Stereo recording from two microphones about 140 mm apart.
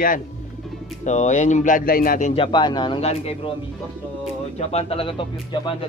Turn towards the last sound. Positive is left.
turn(degrees=35)  # may be behind; listen again after turning